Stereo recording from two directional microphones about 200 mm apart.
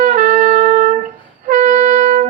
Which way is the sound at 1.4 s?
35° right (ahead or behind).